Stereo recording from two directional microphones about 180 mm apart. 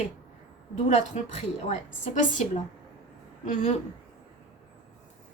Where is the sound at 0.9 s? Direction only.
40° left (ahead or behind).